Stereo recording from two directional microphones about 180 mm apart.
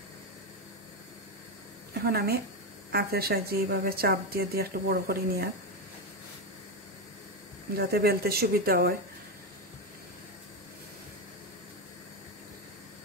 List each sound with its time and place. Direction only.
2.0 s speech: 60° right (ahead or behind)
7.7 s speech: 60° right (ahead or behind)